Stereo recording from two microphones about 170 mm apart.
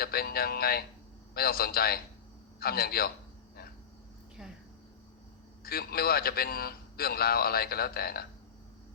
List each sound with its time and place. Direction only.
0.0 s a man's voice: 65° left (ahead or behind)
5.6 s a man's voice: 65° left (ahead or behind)